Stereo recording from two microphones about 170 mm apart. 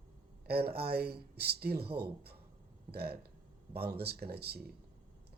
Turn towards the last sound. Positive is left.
turn(degrees=-70)  # may be behind; listen again after turning